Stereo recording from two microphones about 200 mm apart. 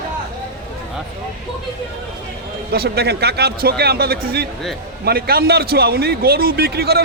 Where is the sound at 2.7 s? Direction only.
50° right (ahead or behind).